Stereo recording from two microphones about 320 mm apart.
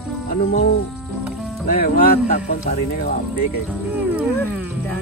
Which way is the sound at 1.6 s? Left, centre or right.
Left.